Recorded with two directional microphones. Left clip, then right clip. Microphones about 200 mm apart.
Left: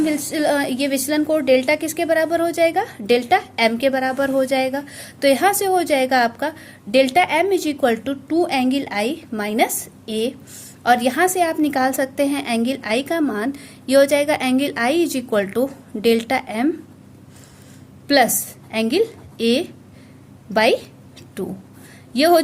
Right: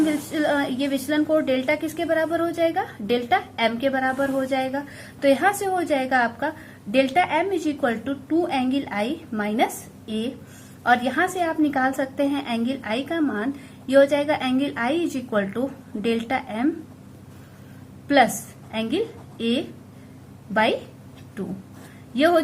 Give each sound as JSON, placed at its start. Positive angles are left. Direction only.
{"t": 0.0, "sound": "a woman's voice", "side_deg": 45}
{"t": 18.7, "sound": "a woman's voice", "side_deg": 45}
{"t": 22.1, "sound": "speech", "side_deg": 45}